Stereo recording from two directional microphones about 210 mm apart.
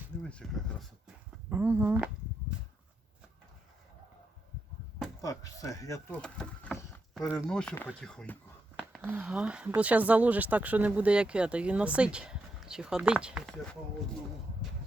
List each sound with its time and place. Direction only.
0.2 s speech: 5° left (ahead or behind)
1.5 s speech: 10° right (ahead or behind)
5.2 s speech: 15° left (ahead or behind)
6.2 s speech: 5° left (ahead or behind)